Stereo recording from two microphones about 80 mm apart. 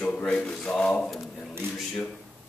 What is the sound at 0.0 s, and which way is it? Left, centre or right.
Speech, centre.